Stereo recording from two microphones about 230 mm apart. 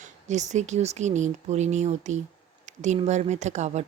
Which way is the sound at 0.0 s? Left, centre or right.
Right.